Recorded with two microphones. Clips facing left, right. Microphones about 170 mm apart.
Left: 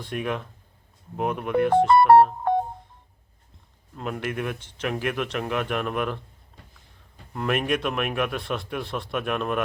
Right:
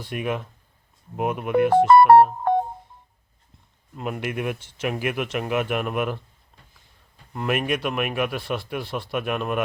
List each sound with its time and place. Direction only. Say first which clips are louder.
0.0 s speech: right 1 dB; 5° right (ahead or behind)
1.9 s music: right 3 dB; 55° right (ahead or behind)
3.9 s speech: right 1 dB; 10° right (ahead or behind)
7.3 s a man's voice: even; 5° right (ahead or behind)